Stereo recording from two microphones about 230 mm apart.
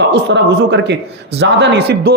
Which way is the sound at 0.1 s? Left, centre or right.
Right.